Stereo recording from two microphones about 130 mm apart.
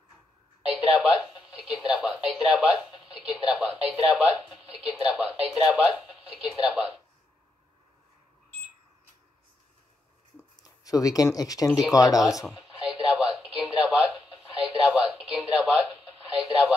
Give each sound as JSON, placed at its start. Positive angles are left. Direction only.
{"t": 0.6, "sound": "a sound", "side_deg": 0}
{"t": 1.5, "sound": "speech", "side_deg": 0}
{"t": 10.5, "sound": "speech", "side_deg": 25}
{"t": 12.4, "sound": "radio", "side_deg": -5}